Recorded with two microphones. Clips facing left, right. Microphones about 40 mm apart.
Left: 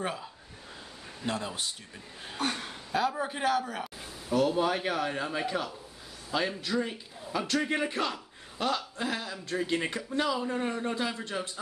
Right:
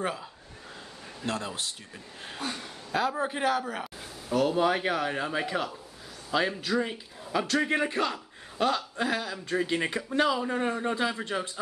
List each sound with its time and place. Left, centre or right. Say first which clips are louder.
0.0 s speech: right 2 dB; centre
2.4 s speech: left 3 dB; left
2.9 s speech: right 1 dB; centre
6.8 s a man's voice: right 2 dB; centre